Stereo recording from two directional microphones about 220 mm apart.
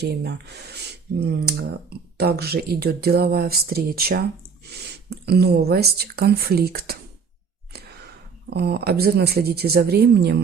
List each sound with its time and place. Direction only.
0.0 s speech: 50° right (ahead or behind)
8.4 s speech: 45° right (ahead or behind)